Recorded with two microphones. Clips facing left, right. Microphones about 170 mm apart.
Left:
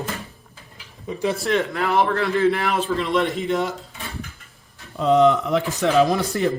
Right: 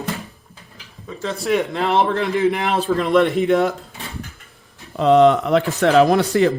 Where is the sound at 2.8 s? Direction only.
50° right (ahead or behind).